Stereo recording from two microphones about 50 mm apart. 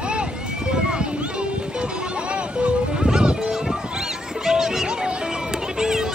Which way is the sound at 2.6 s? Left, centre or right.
Centre.